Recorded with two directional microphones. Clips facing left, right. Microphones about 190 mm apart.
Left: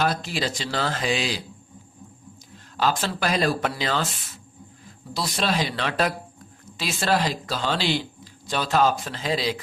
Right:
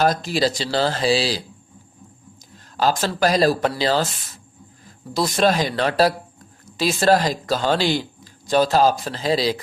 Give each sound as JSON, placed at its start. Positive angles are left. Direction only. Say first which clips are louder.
{"t": 0.0, "sound": "speech", "louder": "right 6 dB", "side_deg": -40}
{"t": 2.7, "sound": "speech", "louder": "right 4 dB", "side_deg": -40}
{"t": 5.1, "sound": "speech", "louder": "right 7 dB", "side_deg": -45}